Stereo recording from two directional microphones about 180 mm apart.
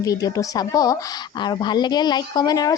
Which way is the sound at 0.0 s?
20° left (ahead or behind).